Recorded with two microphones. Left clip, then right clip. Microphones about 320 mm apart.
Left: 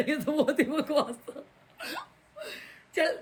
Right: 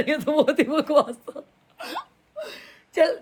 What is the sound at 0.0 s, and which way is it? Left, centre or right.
Speech, centre.